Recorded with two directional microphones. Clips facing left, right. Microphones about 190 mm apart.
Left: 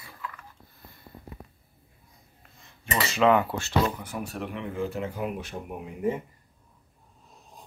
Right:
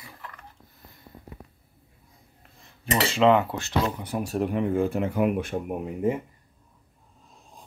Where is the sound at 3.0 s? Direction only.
25° right (ahead or behind).